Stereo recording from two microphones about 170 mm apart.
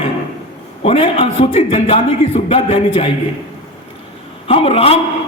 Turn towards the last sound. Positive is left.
turn(degrees=35)  # may be behind; listen again after turning